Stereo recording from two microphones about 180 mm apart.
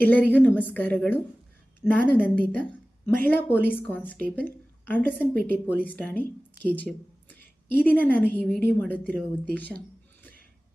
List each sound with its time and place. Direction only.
0.0 s speech: 10° left (ahead or behind)